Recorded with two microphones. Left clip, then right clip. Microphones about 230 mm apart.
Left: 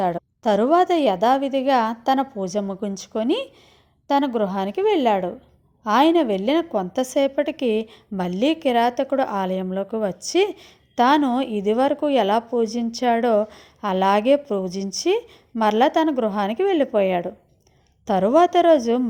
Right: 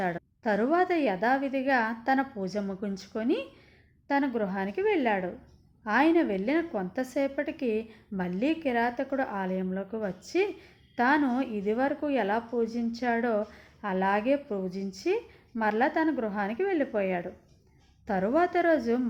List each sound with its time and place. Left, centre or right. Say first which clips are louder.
0.0 s a woman's voice: left 9 dB; left